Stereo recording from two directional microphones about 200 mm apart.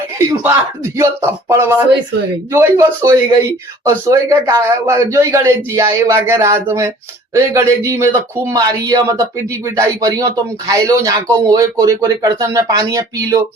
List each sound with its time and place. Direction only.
0.9 s a man's voice: 15° right (ahead or behind)